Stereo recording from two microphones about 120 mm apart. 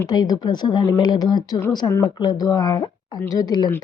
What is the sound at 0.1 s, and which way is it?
Speech, 35° left (ahead or behind).